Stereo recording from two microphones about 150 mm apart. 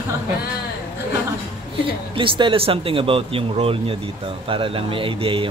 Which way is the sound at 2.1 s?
35° right (ahead or behind).